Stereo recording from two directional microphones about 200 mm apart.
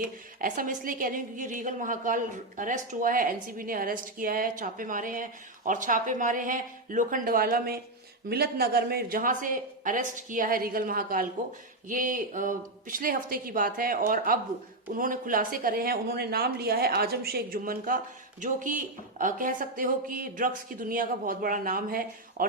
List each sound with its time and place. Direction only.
0.3 s a woman's voice: 40° right (ahead or behind)